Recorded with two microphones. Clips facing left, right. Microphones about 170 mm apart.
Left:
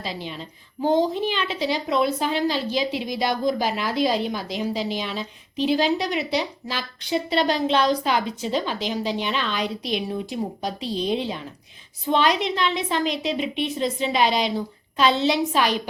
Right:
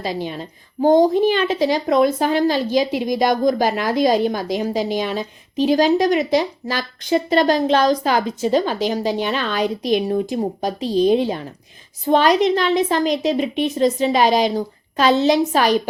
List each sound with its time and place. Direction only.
0.0 s a woman's voice: 45° right (ahead or behind)